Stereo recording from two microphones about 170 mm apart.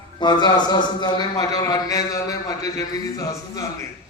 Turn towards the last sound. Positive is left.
turn(degrees=20)  # may be behind; listen again after turning